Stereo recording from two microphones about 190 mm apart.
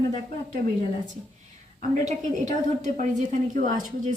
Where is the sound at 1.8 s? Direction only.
40° right (ahead or behind).